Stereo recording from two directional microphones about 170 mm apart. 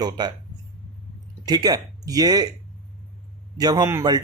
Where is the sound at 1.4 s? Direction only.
25° right (ahead or behind).